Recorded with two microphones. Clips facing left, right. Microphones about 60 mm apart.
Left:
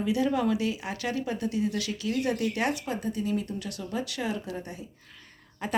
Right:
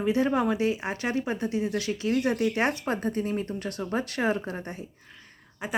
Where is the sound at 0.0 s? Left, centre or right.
Right.